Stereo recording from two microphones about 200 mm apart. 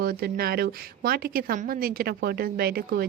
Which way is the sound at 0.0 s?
50° right (ahead or behind).